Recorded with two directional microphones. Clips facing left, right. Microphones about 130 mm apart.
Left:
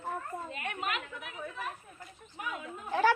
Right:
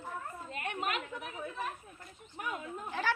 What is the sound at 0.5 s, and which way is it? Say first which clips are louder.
Speech: right 3 dB; 35° right (ahead or behind).